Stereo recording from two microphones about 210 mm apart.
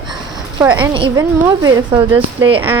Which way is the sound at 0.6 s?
10° right (ahead or behind).